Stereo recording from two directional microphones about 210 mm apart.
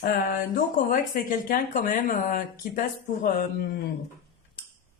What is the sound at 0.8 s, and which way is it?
Speech, 40° left (ahead or behind).